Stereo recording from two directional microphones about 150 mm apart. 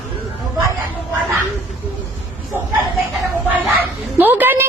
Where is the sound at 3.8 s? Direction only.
10° right (ahead or behind).